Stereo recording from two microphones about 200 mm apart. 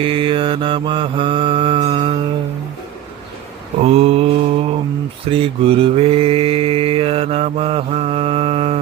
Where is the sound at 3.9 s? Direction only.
30° right (ahead or behind).